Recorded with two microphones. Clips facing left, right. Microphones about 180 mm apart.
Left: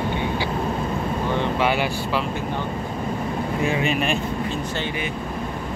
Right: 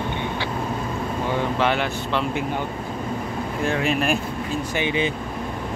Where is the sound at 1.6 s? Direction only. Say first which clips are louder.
Left 1 dB; 5° left (ahead or behind).